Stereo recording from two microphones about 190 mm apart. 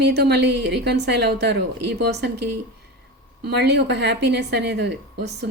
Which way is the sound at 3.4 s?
60° right (ahead or behind).